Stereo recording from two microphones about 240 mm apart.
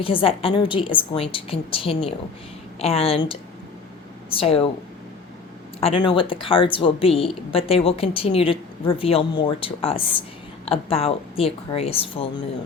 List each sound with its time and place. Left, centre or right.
0.0 s a woman's voice: left
5.8 s a woman's voice: left